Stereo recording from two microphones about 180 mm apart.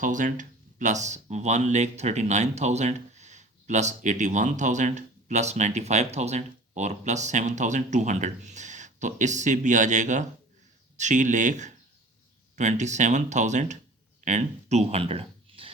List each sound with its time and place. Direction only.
0.0 s speech: 45° right (ahead or behind)